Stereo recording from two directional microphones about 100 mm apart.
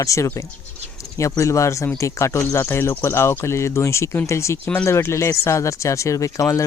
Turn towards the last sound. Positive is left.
turn(degrees=30)  # may be behind; listen again after turning